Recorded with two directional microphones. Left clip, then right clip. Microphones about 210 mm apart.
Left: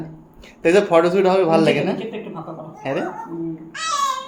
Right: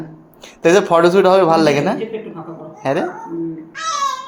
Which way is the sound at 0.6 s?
25° right (ahead or behind).